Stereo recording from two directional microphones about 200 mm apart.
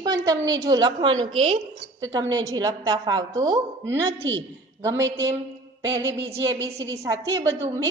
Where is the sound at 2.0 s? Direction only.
15° right (ahead or behind).